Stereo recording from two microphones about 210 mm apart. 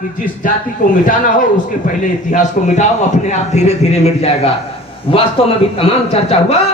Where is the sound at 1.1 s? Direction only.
40° left (ahead or behind).